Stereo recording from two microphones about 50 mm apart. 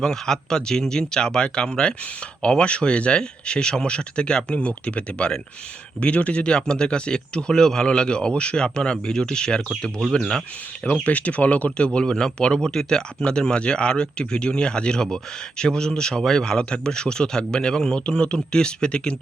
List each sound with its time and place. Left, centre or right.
0.0 s speech: centre
11.0 s speech: left
11.9 s speech: centre